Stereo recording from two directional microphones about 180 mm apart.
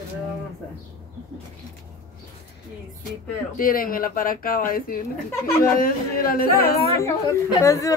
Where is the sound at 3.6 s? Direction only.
50° left (ahead or behind).